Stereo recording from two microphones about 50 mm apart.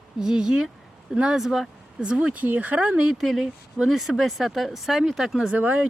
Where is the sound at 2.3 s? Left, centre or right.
Right.